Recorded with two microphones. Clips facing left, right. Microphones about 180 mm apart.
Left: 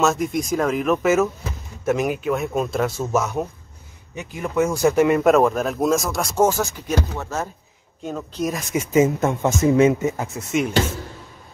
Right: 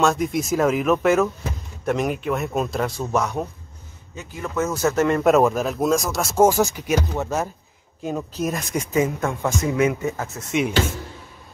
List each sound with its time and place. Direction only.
0.0 s speech: centre (ahead or behind)
4.1 s a man's voice: 15° left (ahead or behind)
5.2 s speech: centre (ahead or behind)
8.9 s speech: 20° left (ahead or behind)
10.1 s a man's voice: 15° left (ahead or behind)